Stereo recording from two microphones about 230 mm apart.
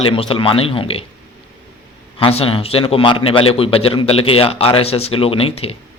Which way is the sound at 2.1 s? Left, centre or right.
Left.